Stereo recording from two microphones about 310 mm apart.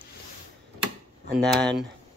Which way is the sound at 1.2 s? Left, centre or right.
Centre.